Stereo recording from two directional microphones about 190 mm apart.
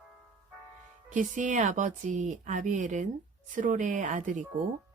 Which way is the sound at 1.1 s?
40° right (ahead or behind).